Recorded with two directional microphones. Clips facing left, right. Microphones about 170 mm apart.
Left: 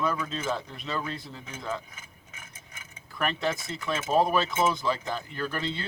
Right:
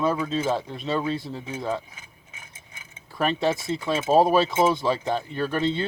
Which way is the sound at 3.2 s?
30° right (ahead or behind).